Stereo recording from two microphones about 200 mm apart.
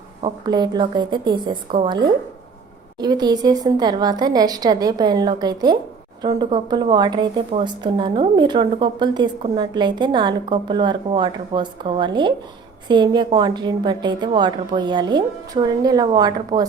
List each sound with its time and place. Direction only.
0.2 s a woman's voice: 25° right (ahead or behind)